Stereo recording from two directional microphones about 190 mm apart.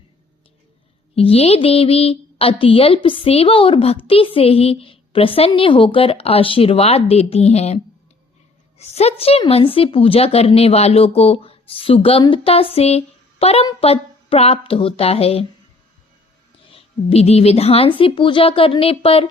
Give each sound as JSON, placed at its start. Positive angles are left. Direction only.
{"t": 1.1, "sound": "speech", "side_deg": 30}
{"t": 8.8, "sound": "a woman's voice", "side_deg": 35}
{"t": 16.6, "sound": "speech", "side_deg": 30}